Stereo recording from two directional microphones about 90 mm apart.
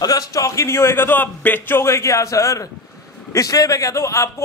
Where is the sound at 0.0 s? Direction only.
40° left (ahead or behind).